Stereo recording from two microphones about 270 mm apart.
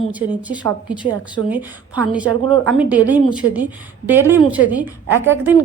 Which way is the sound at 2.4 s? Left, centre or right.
Right.